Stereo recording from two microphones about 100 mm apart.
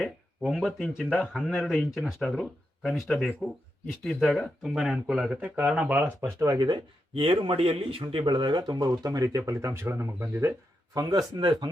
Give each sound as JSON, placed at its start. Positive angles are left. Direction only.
{"t": 0.0, "sound": "a sound", "side_deg": 0}
{"t": 1.2, "sound": "speech", "side_deg": -5}
{"t": 6.2, "sound": "speech", "side_deg": -35}
{"t": 7.1, "sound": "speech", "side_deg": -65}
{"t": 8.9, "sound": "speech", "side_deg": -35}
{"t": 10.9, "sound": "speech", "side_deg": -40}